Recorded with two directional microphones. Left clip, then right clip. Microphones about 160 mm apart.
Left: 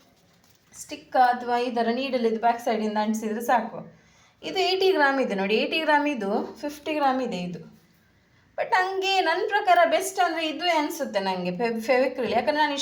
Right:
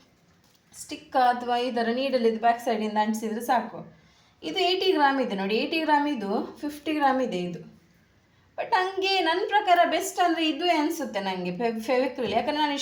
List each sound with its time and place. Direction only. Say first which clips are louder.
0.9 s a woman's voice: left 2 dB; 15° left (ahead or behind)
8.5 s a woman's voice: left 2 dB; 30° left (ahead or behind)